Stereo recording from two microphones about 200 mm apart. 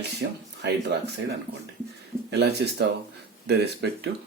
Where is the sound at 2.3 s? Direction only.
55° right (ahead or behind).